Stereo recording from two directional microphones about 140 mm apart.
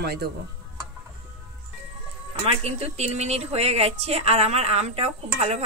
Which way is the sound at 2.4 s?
50° right (ahead or behind).